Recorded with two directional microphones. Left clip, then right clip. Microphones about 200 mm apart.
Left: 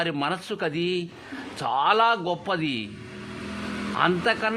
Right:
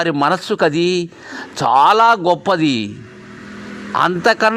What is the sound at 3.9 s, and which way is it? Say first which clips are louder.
Speech: right 9 dB; 35° right (ahead or behind).